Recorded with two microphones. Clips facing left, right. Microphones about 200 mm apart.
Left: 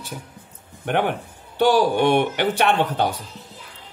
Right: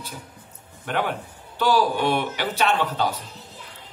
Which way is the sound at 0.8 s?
55° left (ahead or behind).